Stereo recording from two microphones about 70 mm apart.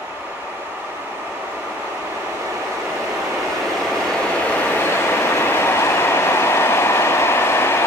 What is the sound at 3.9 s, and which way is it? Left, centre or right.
Vehicle, centre.